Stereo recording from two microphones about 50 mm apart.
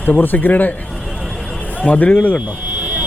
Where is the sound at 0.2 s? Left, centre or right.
Left.